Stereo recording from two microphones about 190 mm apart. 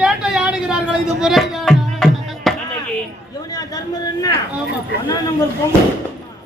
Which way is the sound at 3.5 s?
20° left (ahead or behind).